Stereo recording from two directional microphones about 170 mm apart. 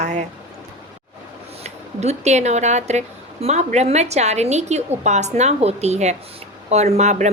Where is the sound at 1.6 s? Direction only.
40° right (ahead or behind).